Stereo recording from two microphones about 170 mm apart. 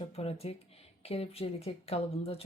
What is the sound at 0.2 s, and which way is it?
Speech, 35° left (ahead or behind).